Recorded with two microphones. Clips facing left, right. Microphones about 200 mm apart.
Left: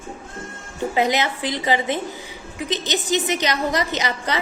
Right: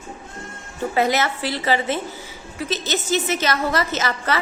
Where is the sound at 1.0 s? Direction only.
15° left (ahead or behind).